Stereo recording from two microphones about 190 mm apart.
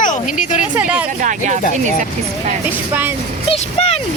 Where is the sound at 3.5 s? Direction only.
30° left (ahead or behind).